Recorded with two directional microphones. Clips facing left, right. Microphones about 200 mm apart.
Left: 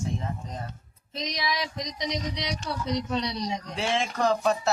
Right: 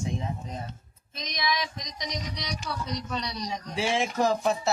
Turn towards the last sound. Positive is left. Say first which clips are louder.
# left 1 dB
turn(degrees=-5)  # may be behind; listen again after turning